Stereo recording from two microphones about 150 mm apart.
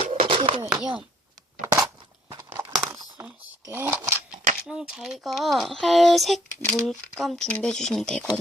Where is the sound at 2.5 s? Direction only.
15° right (ahead or behind).